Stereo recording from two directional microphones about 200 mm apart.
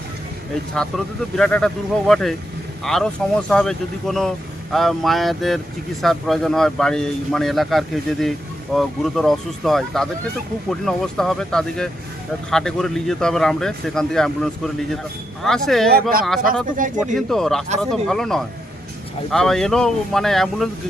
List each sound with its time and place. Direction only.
0.7 s speech: 5° left (ahead or behind)
15.9 s speech: 50° right (ahead or behind)
17.2 s speech: centre (ahead or behind)